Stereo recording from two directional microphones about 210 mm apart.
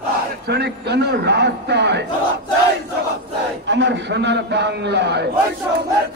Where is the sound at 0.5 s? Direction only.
50° right (ahead or behind).